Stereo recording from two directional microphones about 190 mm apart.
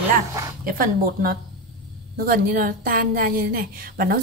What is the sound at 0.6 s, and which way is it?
A woman's voice, 50° right (ahead or behind).